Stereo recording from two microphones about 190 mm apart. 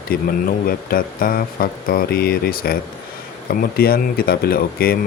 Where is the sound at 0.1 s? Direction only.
50° left (ahead or behind).